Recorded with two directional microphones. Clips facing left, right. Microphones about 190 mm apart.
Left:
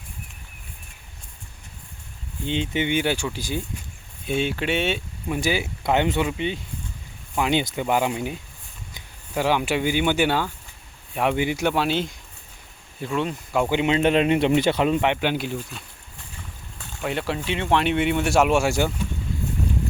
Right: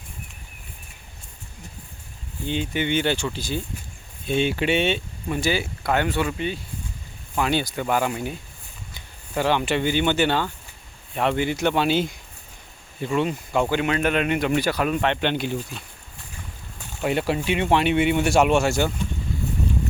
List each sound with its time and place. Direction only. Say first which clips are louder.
2.5 s speech: even; 20° left (ahead or behind)
4.3 s speech: right 2 dB; centre (ahead or behind)
5.4 s speech: even; 15° left (ahead or behind)
13.7 s speech: left 2 dB; 20° left (ahead or behind)
17.0 s speech: right 4 dB; 10° right (ahead or behind); by 18.9 s 10° left (ahead or behind)